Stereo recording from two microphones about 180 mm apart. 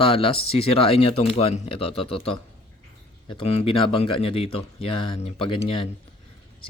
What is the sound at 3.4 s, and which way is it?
Speech, 35° left (ahead or behind).